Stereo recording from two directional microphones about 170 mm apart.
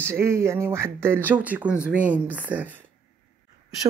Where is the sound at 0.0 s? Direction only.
15° right (ahead or behind).